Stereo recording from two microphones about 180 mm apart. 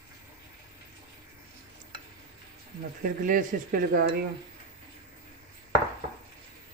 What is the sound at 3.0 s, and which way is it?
Speech, 50° right (ahead or behind).